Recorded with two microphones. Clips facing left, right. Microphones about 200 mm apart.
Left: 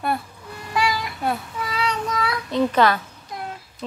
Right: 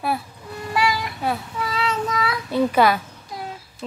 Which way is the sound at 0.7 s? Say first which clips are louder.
Right 1 dB; centre (ahead or behind).